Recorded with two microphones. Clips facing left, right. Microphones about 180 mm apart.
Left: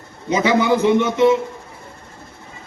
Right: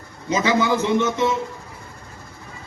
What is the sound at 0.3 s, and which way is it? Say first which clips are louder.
A man's voice: left 3 dB; 15° left (ahead or behind).